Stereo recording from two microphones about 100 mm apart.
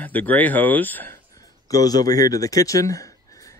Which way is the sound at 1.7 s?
40° left (ahead or behind).